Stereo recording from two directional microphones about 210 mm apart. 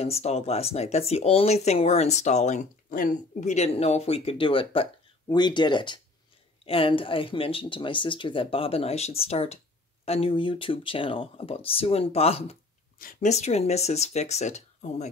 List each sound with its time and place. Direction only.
0.0 s speech: 30° left (ahead or behind)
13.0 s speech: 40° left (ahead or behind)